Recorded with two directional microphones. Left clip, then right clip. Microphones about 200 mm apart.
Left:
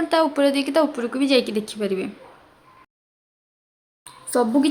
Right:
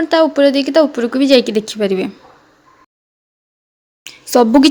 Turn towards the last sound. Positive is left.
turn(degrees=-45)  # may be behind; listen again after turning